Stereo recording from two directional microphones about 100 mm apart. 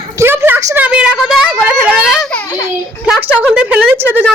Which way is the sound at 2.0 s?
5° right (ahead or behind).